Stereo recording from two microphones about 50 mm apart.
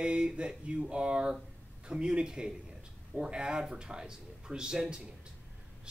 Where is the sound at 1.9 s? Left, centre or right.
Centre.